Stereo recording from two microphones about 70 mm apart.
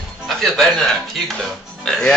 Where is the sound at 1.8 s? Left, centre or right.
Centre.